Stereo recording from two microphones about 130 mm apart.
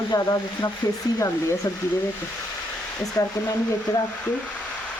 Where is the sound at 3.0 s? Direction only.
25° left (ahead or behind).